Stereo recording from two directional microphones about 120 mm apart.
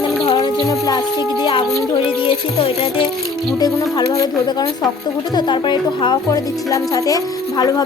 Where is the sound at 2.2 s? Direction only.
55° left (ahead or behind).